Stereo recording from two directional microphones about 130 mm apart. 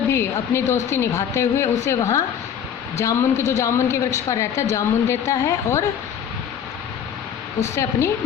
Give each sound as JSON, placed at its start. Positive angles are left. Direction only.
{"t": 0.1, "sound": "a woman's voice", "side_deg": 20}
{"t": 7.8, "sound": "a woman's voice", "side_deg": 20}